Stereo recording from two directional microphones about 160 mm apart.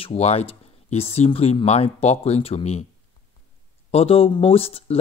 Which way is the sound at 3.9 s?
40° left (ahead or behind).